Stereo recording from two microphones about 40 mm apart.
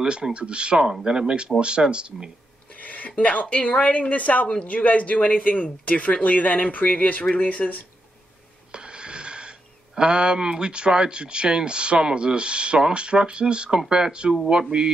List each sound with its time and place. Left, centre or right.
0.0 s speech: right
2.7 s a sound: left
3.1 s speech: left
3.7 s speech: left
8.7 s speech: right